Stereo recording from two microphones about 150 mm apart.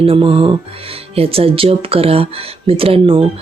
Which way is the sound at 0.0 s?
35° right (ahead or behind).